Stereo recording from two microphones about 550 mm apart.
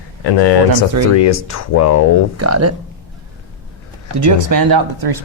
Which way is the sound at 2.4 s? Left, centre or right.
Right.